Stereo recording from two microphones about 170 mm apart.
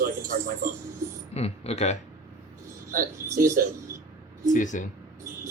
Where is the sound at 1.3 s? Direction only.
40° left (ahead or behind).